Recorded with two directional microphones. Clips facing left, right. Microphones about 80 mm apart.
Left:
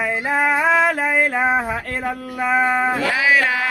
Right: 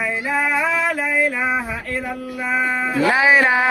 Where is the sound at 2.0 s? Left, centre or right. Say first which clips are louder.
Left 7 dB; left.